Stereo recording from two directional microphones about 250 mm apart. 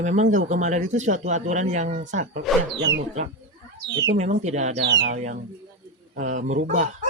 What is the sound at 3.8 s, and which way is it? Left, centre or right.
Speech, right.